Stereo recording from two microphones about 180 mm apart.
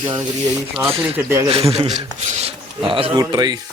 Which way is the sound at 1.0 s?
10° right (ahead or behind).